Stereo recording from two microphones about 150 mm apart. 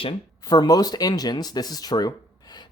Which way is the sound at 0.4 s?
25° left (ahead or behind).